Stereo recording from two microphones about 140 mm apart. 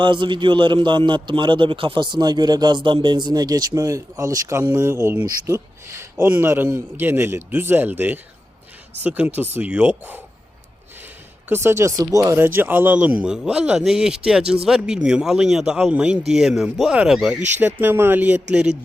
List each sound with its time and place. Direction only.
0.0 s a man's voice: 35° right (ahead or behind); by 10.2 s 10° right (ahead or behind)
11.4 s a man's voice: 15° right (ahead or behind)